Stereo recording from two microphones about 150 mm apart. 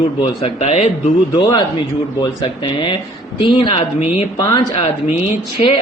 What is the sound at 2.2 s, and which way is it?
Speech, 35° left (ahead or behind).